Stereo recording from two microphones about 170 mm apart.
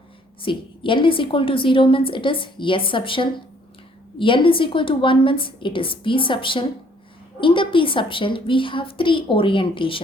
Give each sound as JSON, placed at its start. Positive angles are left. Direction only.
{"t": 0.4, "sound": "a woman's voice", "side_deg": 30}